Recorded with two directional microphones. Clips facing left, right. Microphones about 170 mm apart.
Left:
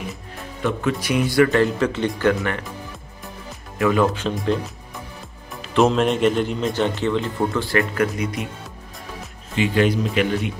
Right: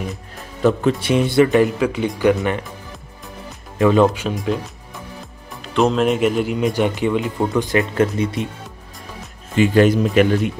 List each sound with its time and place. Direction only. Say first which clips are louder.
0.7 s speech: right 6 dB; 30° right (ahead or behind)
3.7 s speech: right 4 dB; 25° right (ahead or behind)
4.1 s speech: even; 10° right (ahead or behind)
5.6 s speech: even; centre (ahead or behind); by 8.5 s 25° right (ahead or behind)
9.6 s speech: right 5 dB; 45° right (ahead or behind)